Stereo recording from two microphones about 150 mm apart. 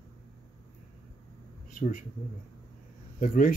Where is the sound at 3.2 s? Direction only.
65° left (ahead or behind).